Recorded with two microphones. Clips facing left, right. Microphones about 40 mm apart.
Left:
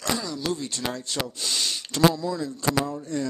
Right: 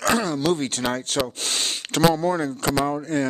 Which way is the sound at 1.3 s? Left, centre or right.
Right.